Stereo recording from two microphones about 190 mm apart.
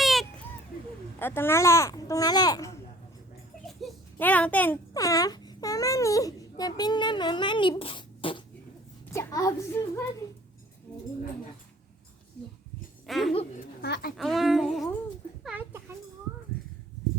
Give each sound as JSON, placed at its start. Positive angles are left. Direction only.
{"t": 0.0, "sound": "a sound", "side_deg": 0}
{"t": 1.2, "sound": "speech", "side_deg": 10}
{"t": 3.7, "sound": "a child's voice", "side_deg": 0}
{"t": 13.1, "sound": "speech", "side_deg": 0}
{"t": 13.8, "sound": "a child's voice", "side_deg": 60}
{"t": 14.2, "sound": "a sound", "side_deg": 0}